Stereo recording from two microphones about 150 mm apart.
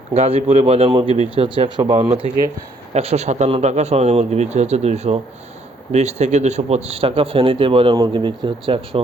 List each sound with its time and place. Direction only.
0.1 s speech: 40° right (ahead or behind)
2.0 s speech: 45° right (ahead or behind)